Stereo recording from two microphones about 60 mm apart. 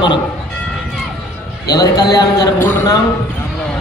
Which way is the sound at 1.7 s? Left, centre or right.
Left.